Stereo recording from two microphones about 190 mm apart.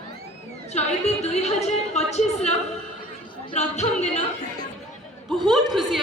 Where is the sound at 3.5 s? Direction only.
35° left (ahead or behind).